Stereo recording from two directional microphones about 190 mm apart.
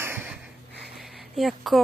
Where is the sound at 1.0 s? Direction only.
Centre (ahead or behind).